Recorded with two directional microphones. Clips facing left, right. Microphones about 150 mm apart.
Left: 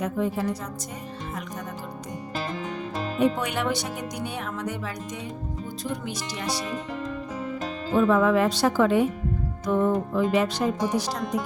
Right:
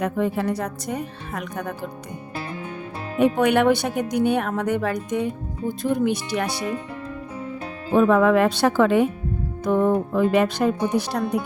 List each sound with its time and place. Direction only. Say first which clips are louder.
0.0 s speech: right 3 dB; 60° right (ahead or behind)
3.2 s speech: right 7 dB; 60° right (ahead or behind)
7.9 s speech: right 4 dB; 60° right (ahead or behind)